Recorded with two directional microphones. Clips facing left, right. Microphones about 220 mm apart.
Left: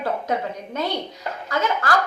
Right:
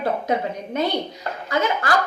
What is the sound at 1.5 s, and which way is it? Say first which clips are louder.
Speech: right 1 dB; 20° right (ahead or behind).